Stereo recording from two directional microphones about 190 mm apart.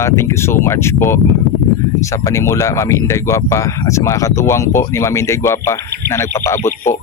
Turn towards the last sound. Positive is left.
turn(degrees=15)  # may be behind; listen again after turning